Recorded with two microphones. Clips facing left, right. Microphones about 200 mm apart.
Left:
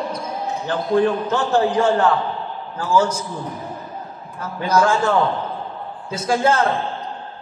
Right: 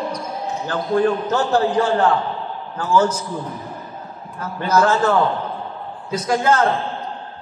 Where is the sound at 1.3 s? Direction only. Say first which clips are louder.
Even; 35° right (ahead or behind).